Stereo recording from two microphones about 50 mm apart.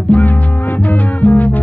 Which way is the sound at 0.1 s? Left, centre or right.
Left.